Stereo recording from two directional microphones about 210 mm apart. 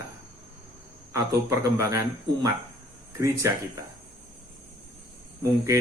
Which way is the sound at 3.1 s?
15° right (ahead or behind).